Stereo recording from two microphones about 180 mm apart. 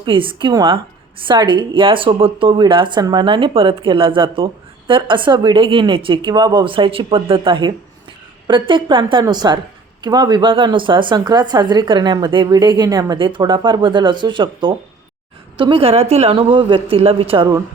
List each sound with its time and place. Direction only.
0.0 s a woman's voice: 30° right (ahead or behind)